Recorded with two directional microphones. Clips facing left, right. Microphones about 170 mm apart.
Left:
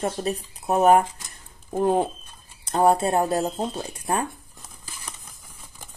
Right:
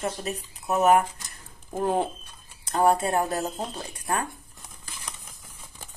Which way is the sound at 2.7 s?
25° left (ahead or behind).